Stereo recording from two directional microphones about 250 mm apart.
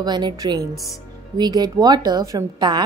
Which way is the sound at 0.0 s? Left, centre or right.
Centre.